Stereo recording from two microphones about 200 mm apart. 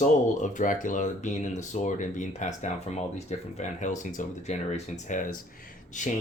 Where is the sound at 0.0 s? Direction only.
40° left (ahead or behind).